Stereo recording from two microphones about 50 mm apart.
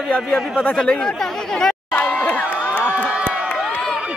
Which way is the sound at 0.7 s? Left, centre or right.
Centre.